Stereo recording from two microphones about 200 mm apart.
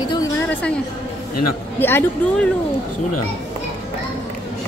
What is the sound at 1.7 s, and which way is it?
Speech, 10° left (ahead or behind).